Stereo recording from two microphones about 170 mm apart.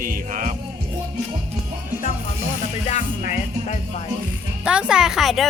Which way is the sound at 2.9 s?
45° left (ahead or behind).